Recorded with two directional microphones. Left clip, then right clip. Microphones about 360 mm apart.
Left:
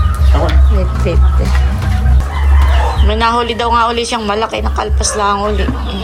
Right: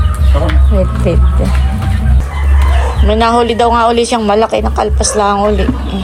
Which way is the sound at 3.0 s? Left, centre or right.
Centre.